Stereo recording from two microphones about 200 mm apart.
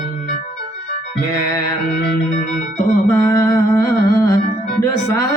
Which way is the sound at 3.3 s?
15° left (ahead or behind).